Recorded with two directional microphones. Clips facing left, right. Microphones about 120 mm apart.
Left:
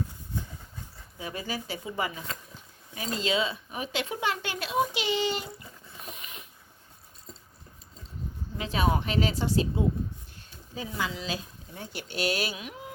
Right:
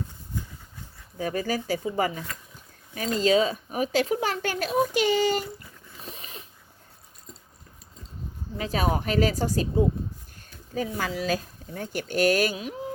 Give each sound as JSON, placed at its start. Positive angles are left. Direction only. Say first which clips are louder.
{"t": 1.2, "sound": "speech", "louder": "right 7 dB", "side_deg": -45}
{"t": 6.0, "sound": "a sound", "louder": "right 2 dB", "side_deg": -30}
{"t": 8.5, "sound": "speech", "louder": "right 1 dB", "side_deg": -40}